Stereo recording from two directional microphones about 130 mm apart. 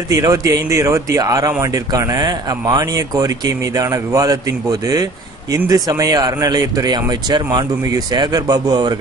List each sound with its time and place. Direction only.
0.1 s speech: 25° right (ahead or behind)